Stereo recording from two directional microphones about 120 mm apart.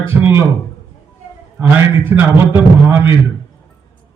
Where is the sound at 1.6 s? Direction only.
15° right (ahead or behind).